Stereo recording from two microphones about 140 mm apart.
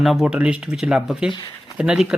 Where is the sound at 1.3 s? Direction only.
25° left (ahead or behind).